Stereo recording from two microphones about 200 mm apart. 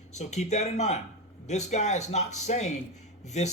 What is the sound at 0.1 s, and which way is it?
A man's voice, 35° left (ahead or behind).